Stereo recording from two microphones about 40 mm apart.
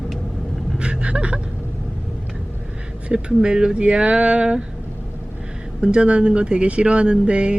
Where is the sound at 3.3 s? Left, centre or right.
Centre.